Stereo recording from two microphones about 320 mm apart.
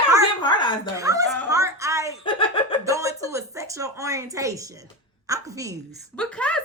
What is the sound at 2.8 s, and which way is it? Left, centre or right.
A woman's voice, centre.